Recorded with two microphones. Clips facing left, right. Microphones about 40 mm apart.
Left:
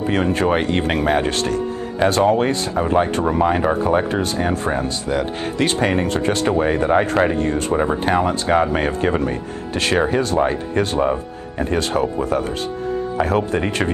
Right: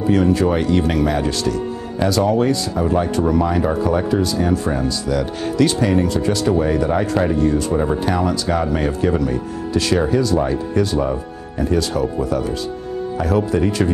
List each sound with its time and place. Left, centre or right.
0.0 s speech: left
7.7 s speech: left